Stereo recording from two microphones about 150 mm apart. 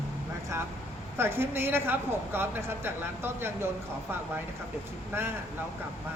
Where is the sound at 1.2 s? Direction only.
15° right (ahead or behind).